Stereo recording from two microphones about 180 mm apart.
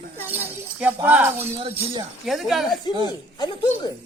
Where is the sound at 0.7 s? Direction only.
10° right (ahead or behind).